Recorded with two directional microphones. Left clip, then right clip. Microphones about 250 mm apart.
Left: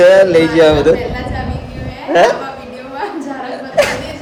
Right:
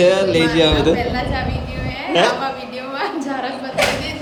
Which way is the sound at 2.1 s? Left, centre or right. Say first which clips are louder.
Left 6 dB; centre.